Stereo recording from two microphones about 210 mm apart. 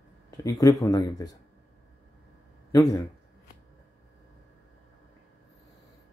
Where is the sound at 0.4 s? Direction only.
15° left (ahead or behind).